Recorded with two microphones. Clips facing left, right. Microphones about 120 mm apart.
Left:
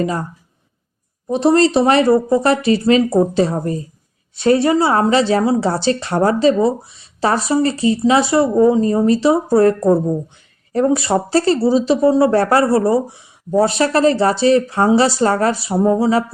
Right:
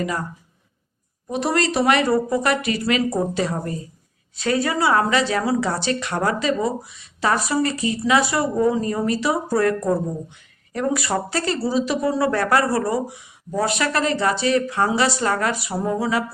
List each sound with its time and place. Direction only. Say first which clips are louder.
0.0 s speech: left 5 dB; 30° left (ahead or behind)
1.3 s speech: left 9 dB; 30° left (ahead or behind)